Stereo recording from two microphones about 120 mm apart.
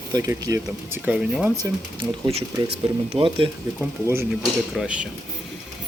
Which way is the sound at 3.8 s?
20° right (ahead or behind).